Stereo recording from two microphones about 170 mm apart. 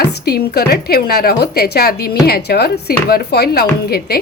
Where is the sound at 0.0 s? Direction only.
70° left (ahead or behind).